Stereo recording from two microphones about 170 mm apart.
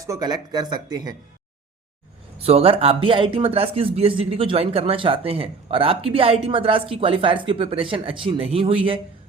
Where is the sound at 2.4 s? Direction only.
35° right (ahead or behind).